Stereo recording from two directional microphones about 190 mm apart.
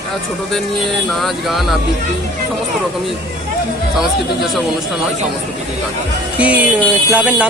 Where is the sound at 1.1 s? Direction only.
Centre (ahead or behind).